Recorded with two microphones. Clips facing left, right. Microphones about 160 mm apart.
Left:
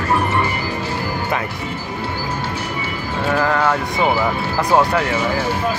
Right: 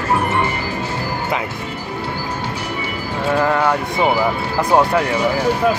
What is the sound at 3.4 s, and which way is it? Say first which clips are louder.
Speech: right 1 dB; 15° right (ahead or behind).